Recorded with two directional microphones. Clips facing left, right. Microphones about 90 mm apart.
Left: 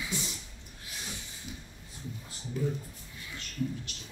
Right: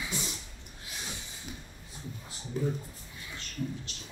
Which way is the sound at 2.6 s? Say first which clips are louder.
Right 1 dB; 30° right (ahead or behind).